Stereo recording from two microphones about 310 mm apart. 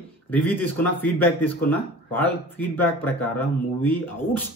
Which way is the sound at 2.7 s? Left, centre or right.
Centre.